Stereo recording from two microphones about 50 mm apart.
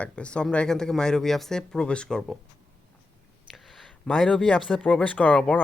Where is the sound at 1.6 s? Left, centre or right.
Centre.